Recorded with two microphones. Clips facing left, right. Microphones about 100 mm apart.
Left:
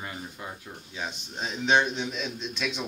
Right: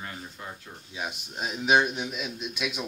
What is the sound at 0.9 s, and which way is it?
A man's voice, 10° right (ahead or behind).